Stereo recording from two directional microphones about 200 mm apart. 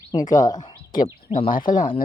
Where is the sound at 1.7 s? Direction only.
45° left (ahead or behind).